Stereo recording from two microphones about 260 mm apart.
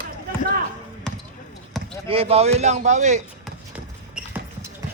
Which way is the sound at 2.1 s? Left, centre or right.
Right.